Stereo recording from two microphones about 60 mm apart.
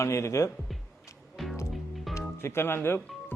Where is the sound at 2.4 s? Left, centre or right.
Left.